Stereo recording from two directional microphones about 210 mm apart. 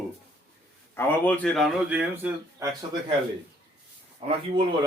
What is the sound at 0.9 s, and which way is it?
Speech, 10° left (ahead or behind).